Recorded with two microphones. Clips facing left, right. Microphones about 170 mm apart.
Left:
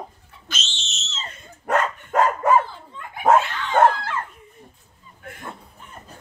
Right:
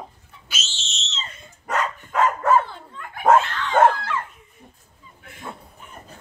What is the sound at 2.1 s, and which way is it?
Dog, 45° left (ahead or behind).